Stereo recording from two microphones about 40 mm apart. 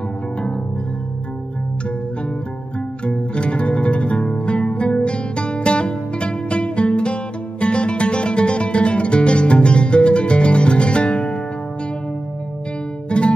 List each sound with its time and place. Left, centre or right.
3.1 s music: left
13.1 s music: left